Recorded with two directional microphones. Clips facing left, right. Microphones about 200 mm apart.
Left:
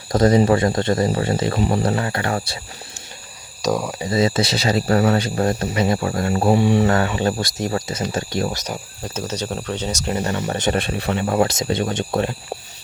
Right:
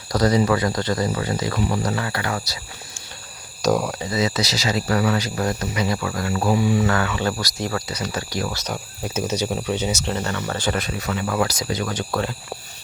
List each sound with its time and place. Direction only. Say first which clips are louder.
0.1 s speech: left 4 dB; 25° left (ahead or behind)
3.6 s speech: right 1 dB; centre (ahead or behind)
4.1 s speech: left 5 dB; 30° left (ahead or behind)
7.2 s speech: left 3 dB; 25° left (ahead or behind)
8.5 s speech: even; 10° left (ahead or behind)
9.0 s speech: right 2 dB; 10° right (ahead or behind)
10.1 s speech: left 3 dB; 15° left (ahead or behind)